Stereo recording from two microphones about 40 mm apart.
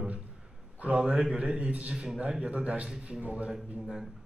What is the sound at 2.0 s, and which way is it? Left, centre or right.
A man's voice, right.